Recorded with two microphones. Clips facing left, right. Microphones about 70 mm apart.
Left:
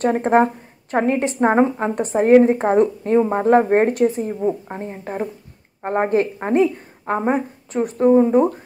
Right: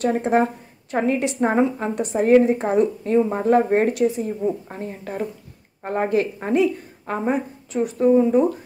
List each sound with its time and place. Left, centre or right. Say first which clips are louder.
0.0 s speech: left 3 dB; left
4.4 s speech: left 2 dB; left